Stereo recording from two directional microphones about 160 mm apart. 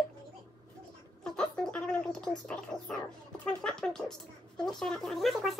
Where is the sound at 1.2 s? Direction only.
5° left (ahead or behind).